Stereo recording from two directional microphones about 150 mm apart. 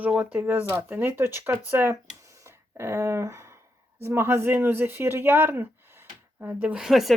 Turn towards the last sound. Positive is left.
turn(degrees=0)  # may be behind; listen again after turning